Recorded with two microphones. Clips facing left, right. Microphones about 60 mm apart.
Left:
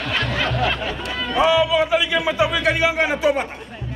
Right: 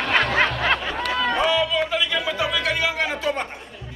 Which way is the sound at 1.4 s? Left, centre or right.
Centre.